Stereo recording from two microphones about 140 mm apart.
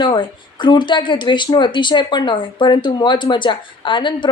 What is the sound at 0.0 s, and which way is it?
Speech, 35° left (ahead or behind).